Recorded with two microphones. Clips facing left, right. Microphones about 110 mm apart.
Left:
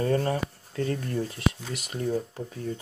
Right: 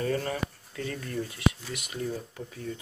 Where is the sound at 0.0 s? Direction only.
35° left (ahead or behind).